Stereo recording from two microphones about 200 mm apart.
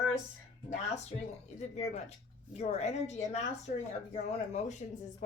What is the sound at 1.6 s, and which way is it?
A woman's voice, 35° left (ahead or behind).